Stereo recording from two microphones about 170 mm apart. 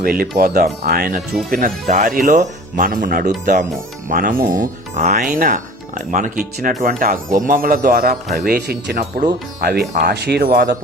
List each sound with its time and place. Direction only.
0.0 s a man's voice: 60° right (ahead or behind)
3.2 s speech: 45° right (ahead or behind)
4.1 s a man's voice: 60° right (ahead or behind)
10.0 s a man's voice: 75° right (ahead or behind); by 10.8 s 60° right (ahead or behind)